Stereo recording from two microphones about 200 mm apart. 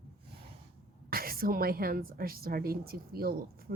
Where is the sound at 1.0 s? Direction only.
45° right (ahead or behind).